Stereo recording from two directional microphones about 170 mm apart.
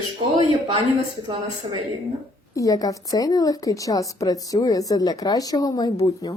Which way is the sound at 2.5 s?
20° left (ahead or behind).